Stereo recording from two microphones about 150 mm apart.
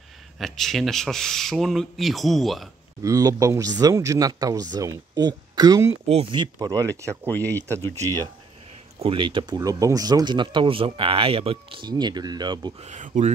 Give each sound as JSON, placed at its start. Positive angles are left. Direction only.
{"t": 0.4, "sound": "speech", "side_deg": 0}
{"t": 3.0, "sound": "speech", "side_deg": -25}
{"t": 9.0, "sound": "speech", "side_deg": -35}
{"t": 12.8, "sound": "speech", "side_deg": -55}